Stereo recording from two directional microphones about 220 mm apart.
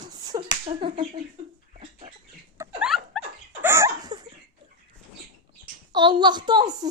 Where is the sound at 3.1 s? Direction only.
5° left (ahead or behind).